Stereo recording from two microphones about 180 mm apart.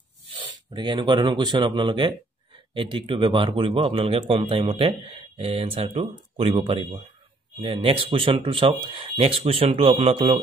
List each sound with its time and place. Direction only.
0.3 s speech: 25° right (ahead or behind)